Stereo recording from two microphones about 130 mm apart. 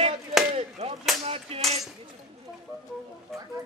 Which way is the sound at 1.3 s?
50° right (ahead or behind).